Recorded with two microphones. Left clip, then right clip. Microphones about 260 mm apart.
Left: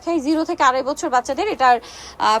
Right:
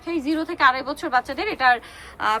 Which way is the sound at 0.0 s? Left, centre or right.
Centre.